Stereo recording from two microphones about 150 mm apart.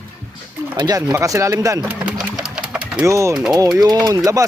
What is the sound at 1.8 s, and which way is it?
Pigeon, 5° right (ahead or behind).